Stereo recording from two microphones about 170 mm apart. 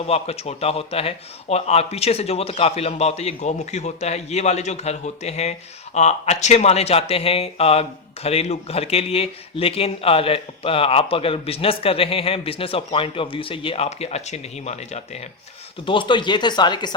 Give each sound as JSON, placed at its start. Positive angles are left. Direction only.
{"t": 0.0, "sound": "a man's voice", "side_deg": 35}
{"t": 15.9, "sound": "speech", "side_deg": 30}